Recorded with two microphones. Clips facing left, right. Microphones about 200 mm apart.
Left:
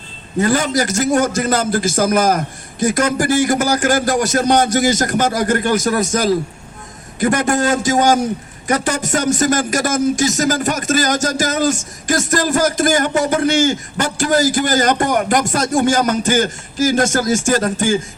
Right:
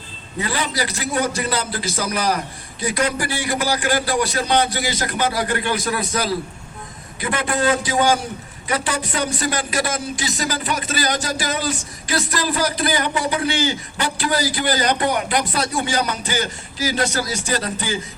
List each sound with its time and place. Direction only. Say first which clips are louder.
0.3 s a man's voice: left 8 dB; 45° left (ahead or behind)